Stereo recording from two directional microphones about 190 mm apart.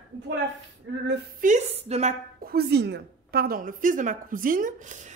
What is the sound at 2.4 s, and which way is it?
A woman's voice, 55° right (ahead or behind).